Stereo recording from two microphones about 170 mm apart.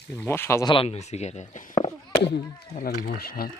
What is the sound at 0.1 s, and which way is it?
Speech, 10° left (ahead or behind).